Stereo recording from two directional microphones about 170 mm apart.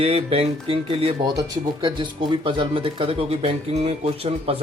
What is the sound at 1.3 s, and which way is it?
Speech, 20° right (ahead or behind).